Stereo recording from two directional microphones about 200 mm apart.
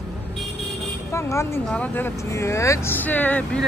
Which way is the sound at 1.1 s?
15° left (ahead or behind).